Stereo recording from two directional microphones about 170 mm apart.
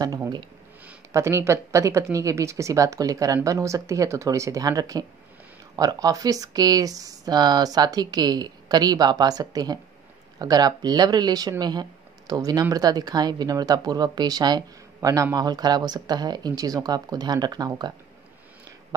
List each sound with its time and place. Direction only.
0.0 s speech: 20° right (ahead or behind)